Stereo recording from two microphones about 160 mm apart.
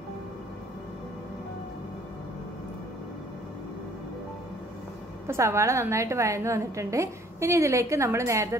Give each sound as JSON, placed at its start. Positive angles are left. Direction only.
{"t": 5.2, "sound": "a woman's voice", "side_deg": -15}